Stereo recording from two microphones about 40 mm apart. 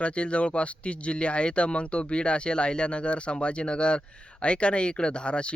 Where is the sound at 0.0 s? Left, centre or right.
Left.